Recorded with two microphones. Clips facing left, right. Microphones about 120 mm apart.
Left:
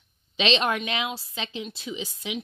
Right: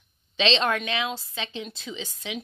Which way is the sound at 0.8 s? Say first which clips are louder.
Right 1 dB; 20° left (ahead or behind).